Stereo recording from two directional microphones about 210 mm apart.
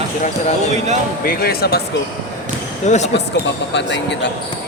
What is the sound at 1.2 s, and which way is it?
Speech, 45° left (ahead or behind).